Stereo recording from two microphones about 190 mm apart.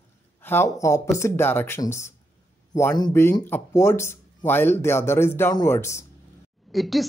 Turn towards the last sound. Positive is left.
turn(degrees=0)  # may be behind; listen again after turning